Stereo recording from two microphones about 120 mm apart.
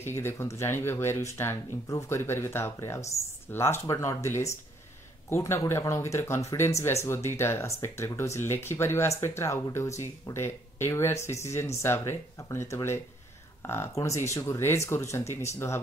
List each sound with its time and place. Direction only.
0.0 s speech: 20° left (ahead or behind)